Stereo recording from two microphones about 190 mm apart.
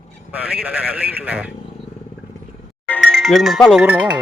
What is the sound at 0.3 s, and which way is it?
A man's voice, 5° right (ahead or behind).